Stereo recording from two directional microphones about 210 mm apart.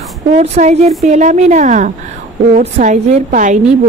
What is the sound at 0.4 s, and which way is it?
A woman's voice, 35° right (ahead or behind).